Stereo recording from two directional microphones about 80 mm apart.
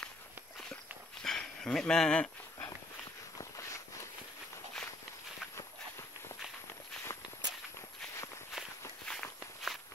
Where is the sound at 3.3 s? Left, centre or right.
Left.